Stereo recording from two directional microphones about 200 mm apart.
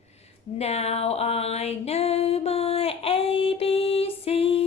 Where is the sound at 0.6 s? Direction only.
30° left (ahead or behind).